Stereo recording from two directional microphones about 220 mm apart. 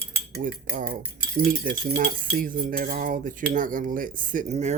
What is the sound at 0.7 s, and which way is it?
Cutlery, 40° right (ahead or behind).